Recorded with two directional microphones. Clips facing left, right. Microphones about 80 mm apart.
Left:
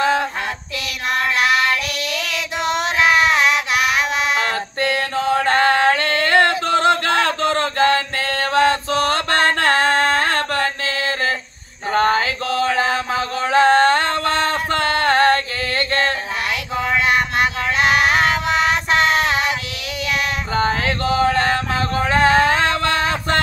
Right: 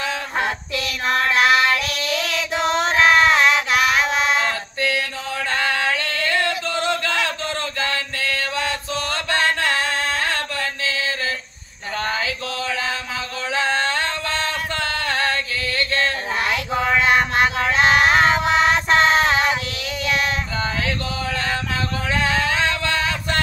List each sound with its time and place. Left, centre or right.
1.1 s female singing: centre
4.4 s a sound: left
8.9 s music: left
9.6 s music: left
11.9 s chant: left
16.7 s a sound: centre
18.9 s music: centre
20.5 s mantra: left
21.4 s music: left